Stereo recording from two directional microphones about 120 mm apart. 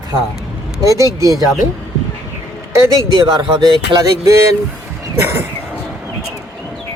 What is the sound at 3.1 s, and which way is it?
Speech, 40° right (ahead or behind).